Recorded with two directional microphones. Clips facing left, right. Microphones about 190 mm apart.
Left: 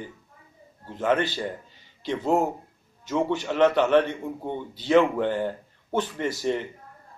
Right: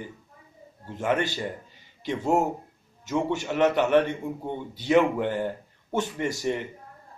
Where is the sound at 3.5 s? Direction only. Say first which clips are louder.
Left 1 dB; 15° right (ahead or behind).